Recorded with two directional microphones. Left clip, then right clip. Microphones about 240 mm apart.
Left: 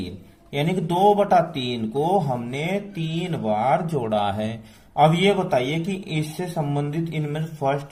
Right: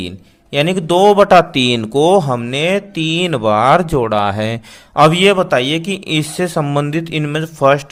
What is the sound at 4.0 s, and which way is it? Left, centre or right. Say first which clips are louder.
A man's voice: right 8 dB; right.